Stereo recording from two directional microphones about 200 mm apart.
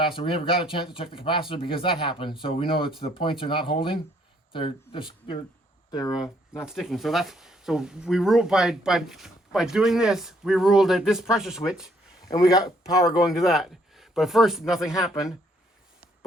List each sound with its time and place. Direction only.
0.0 s speech: 25° left (ahead or behind)
6.2 s speech: 15° left (ahead or behind)
6.7 s speech: centre (ahead or behind)
12.3 s speech: 20° left (ahead or behind)
13.0 s speech: 5° right (ahead or behind)